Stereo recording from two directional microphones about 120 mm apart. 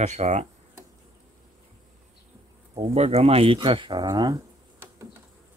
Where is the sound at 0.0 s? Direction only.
70° right (ahead or behind).